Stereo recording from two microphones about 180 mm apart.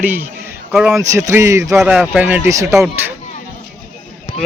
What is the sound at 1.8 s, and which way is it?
A man's voice, 5° right (ahead or behind).